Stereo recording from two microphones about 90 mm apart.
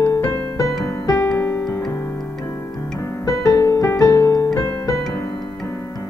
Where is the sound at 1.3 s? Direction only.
25° left (ahead or behind).